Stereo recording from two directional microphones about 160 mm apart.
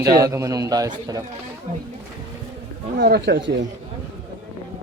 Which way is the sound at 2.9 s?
90° right.